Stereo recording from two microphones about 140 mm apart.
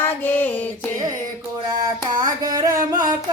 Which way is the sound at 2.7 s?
25° right (ahead or behind).